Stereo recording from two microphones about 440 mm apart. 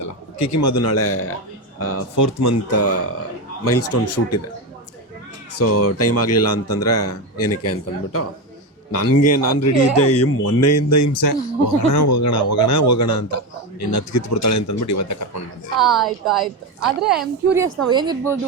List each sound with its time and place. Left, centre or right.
0.0 s a man's voice: left
5.5 s a man's voice: left
15.8 s a woman's voice: centre